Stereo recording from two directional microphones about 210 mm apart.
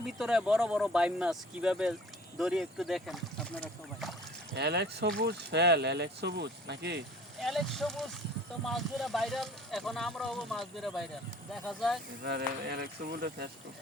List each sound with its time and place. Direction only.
0.2 s speech: 5° right (ahead or behind)
4.5 s speech: 50° right (ahead or behind)
7.3 s speech: centre (ahead or behind)
12.2 s speech: 50° right (ahead or behind)